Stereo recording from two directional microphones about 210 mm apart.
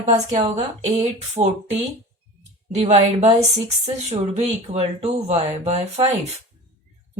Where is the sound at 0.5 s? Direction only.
30° right (ahead or behind).